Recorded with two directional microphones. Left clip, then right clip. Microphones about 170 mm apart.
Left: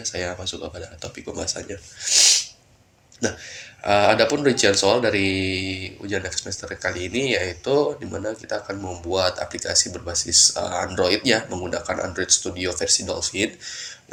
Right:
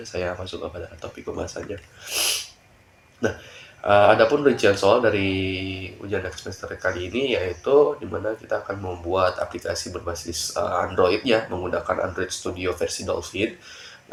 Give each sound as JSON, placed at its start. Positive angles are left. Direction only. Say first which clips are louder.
{"t": 0.0, "sound": "speech", "louder": "left 1 dB", "side_deg": 25}
{"t": 3.8, "sound": "speech", "louder": "right 2 dB", "side_deg": 40}